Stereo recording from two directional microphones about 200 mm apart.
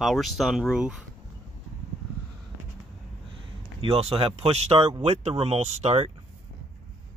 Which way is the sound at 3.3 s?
25° right (ahead or behind).